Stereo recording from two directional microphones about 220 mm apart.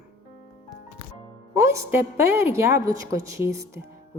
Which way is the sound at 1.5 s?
15° right (ahead or behind).